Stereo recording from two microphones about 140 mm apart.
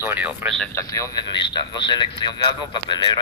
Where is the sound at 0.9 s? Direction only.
25° left (ahead or behind).